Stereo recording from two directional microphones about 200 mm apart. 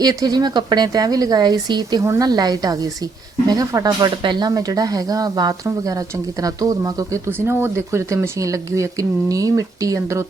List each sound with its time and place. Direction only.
0.0 s a woman's voice: 20° right (ahead or behind)